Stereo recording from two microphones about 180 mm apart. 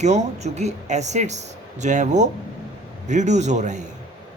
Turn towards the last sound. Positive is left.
turn(degrees=-40)  # may be behind; listen again after turning